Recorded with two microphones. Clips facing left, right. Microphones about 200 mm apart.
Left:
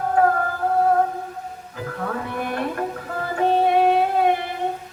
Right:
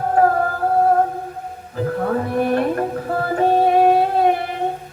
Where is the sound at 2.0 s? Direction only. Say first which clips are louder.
Right 7 dB; 35° right (ahead or behind).